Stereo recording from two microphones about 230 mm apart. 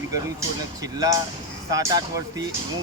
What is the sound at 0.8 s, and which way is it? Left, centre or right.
Speech, centre.